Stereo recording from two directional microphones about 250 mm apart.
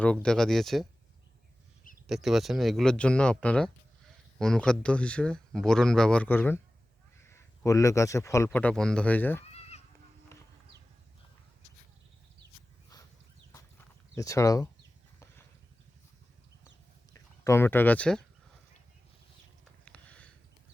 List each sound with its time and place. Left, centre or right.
0.0 s speech: centre
2.0 s a man's voice: centre
9.5 s goat: left
10.3 s a sound: centre
14.2 s speech: centre
17.4 s speech: centre
19.8 s a sound: centre